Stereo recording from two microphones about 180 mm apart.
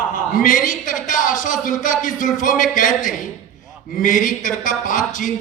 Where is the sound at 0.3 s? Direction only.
50° left (ahead or behind).